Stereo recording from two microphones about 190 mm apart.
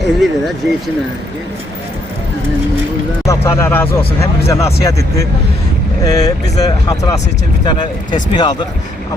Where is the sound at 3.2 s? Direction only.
15° left (ahead or behind).